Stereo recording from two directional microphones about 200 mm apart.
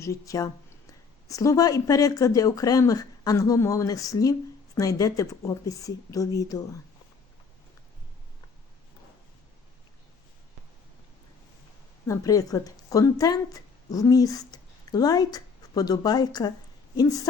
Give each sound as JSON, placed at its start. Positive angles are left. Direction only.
{"t": 0.0, "sound": "speech", "side_deg": 15}
{"t": 12.0, "sound": "speech", "side_deg": 15}